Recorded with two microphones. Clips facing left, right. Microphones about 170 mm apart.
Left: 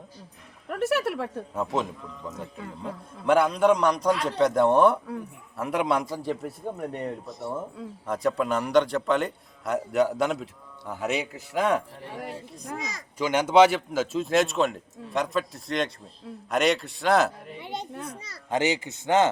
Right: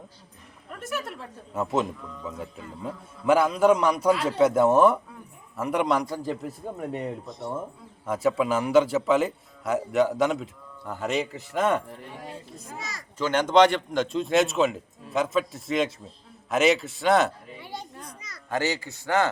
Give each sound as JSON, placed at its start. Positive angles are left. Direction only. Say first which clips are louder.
{"t": 0.7, "sound": "a woman's voice", "louder": "left 8 dB", "side_deg": 70}
{"t": 1.5, "sound": "a man's voice", "louder": "right 3 dB", "side_deg": 0}
{"t": 12.8, "sound": "a man's voice", "louder": "right 1 dB", "side_deg": 15}
{"t": 17.6, "sound": "children playing", "louder": "left 4 dB", "side_deg": 20}
{"t": 18.5, "sound": "speech", "louder": "left 2 dB", "side_deg": 20}